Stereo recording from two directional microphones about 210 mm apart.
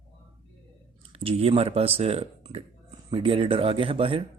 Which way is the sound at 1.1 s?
25° right (ahead or behind).